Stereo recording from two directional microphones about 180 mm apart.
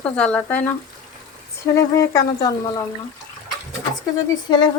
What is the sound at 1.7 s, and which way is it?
Speech, 20° left (ahead or behind).